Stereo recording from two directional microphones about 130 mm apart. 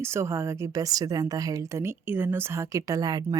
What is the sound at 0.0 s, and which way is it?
A woman's voice, 20° right (ahead or behind).